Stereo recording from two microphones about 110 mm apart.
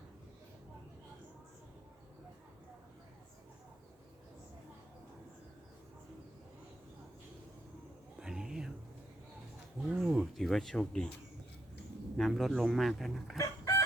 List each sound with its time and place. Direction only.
8.2 s a sound: 5° right (ahead or behind)
9.9 s speech: 5° right (ahead or behind)
12.1 s speech: centre (ahead or behind)
13.3 s chicken: 30° left (ahead or behind)